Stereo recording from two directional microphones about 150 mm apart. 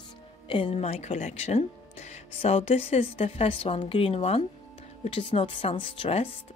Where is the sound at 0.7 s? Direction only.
45° left (ahead or behind).